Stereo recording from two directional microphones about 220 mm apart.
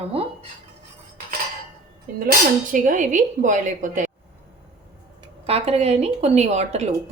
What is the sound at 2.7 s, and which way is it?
A woman's voice, 35° right (ahead or behind).